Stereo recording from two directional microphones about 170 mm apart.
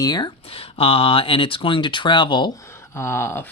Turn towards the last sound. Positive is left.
turn(degrees=15)  # may be behind; listen again after turning